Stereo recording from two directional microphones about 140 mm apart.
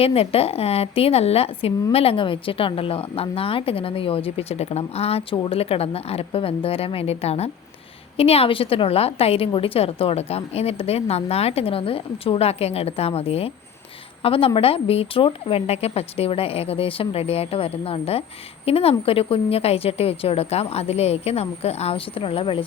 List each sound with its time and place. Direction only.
0.0 s a woman's voice: 45° left (ahead or behind)